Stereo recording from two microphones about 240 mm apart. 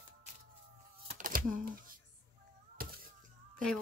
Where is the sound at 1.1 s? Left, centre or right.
Right.